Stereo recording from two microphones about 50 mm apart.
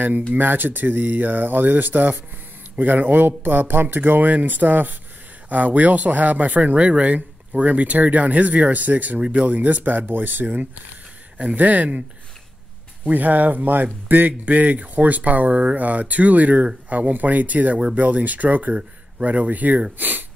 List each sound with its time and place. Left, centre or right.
0.3 s speech: right
11.3 s speech: right
13.0 s speech: right